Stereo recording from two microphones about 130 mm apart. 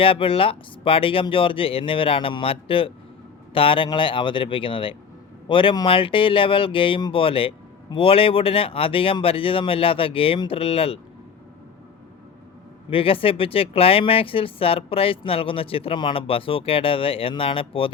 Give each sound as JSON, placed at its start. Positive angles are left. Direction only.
{"t": 0.0, "sound": "speech", "side_deg": 45}
{"t": 12.9, "sound": "speech", "side_deg": 45}